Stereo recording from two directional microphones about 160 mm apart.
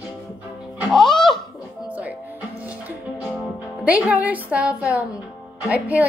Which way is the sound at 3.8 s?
10° right (ahead or behind).